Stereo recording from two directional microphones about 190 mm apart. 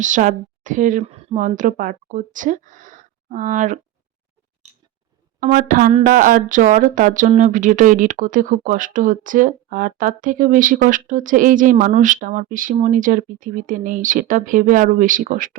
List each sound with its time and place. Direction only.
0.0 s speech: 40° right (ahead or behind)
5.4 s speech: 45° right (ahead or behind)